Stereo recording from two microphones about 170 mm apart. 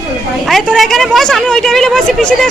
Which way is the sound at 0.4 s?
Centre (ahead or behind).